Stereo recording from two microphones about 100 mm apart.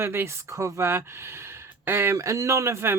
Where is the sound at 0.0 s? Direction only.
25° right (ahead or behind).